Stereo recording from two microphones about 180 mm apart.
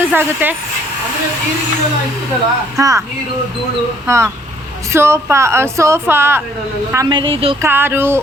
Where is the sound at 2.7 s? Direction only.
20° right (ahead or behind).